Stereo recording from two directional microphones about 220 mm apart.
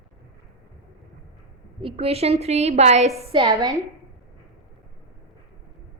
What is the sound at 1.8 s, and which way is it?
A woman's voice, 25° right (ahead or behind).